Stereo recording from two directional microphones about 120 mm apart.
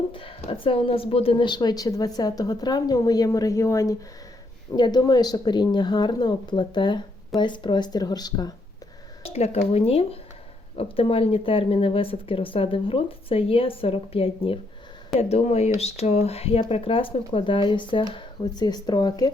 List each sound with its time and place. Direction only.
0.1 s a woman's voice: 45° left (ahead or behind); by 3.9 s 25° left (ahead or behind)
4.7 s a woman's voice: 35° left (ahead or behind)
9.2 s speech: 60° left (ahead or behind)
15.2 s a woman's voice: 65° left (ahead or behind); by 19.3 s 35° left (ahead or behind)